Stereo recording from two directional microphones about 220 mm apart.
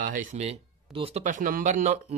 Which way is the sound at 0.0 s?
35° right (ahead or behind).